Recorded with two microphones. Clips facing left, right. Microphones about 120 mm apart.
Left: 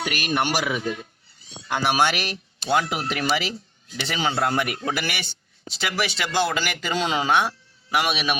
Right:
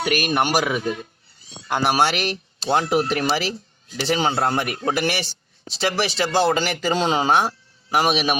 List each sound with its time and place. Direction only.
0.0 s speech: 45° right (ahead or behind)